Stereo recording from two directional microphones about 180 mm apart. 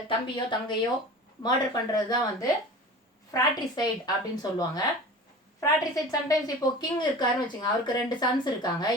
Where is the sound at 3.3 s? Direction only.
20° left (ahead or behind).